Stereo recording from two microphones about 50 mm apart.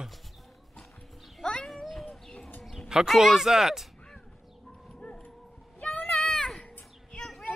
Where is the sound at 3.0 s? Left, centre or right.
Centre.